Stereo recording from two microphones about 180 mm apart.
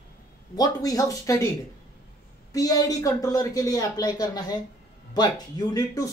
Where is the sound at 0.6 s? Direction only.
20° left (ahead or behind).